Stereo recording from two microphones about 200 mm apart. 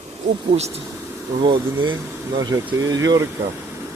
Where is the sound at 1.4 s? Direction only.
25° right (ahead or behind).